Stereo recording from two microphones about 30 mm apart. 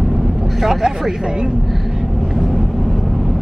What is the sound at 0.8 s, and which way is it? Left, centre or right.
Speech, right.